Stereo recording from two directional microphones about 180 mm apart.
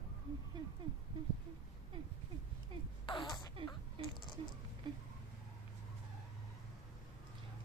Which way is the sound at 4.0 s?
30° right (ahead or behind).